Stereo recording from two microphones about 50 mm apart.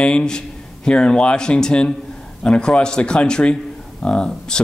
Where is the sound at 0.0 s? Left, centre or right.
Centre.